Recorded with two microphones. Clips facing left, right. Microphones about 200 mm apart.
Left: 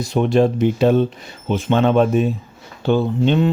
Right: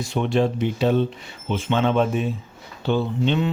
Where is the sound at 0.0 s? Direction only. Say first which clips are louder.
Left 5 dB; 40° left (ahead or behind).